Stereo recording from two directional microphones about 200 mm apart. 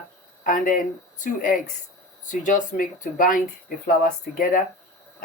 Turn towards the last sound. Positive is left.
turn(degrees=45)  # may be behind; listen again after turning